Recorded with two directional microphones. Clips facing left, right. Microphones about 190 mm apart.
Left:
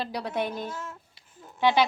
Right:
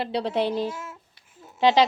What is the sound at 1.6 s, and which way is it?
Speech, 85° right.